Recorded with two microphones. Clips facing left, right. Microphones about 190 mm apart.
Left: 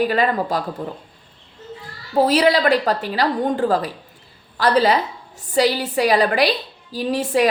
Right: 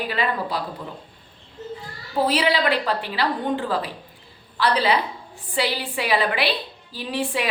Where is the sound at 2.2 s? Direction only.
40° left (ahead or behind).